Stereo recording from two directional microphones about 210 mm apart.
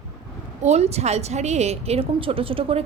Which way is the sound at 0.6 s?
30° right (ahead or behind).